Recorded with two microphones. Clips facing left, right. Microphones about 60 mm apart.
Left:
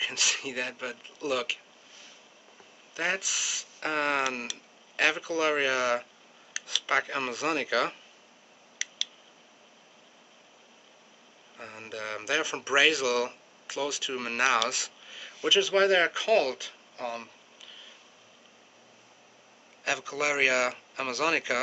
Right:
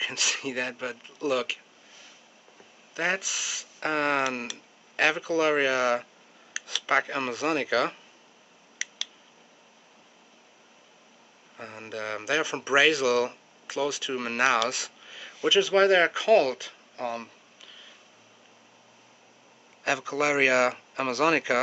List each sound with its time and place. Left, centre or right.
0.0 s speech: centre
3.3 s speech: centre
5.2 s speech: centre
7.1 s speech: centre
8.7 s a sound: right
11.5 s speech: centre
15.0 s a sound: centre
15.5 s speech: centre
19.8 s speech: right